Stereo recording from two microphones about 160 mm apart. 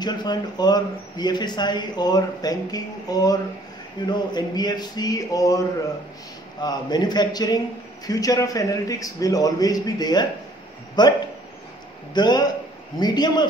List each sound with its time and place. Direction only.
0.0 s speech: 25° left (ahead or behind)